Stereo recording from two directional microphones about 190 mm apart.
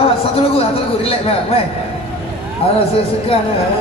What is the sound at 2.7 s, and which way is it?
Speech, 30° left (ahead or behind).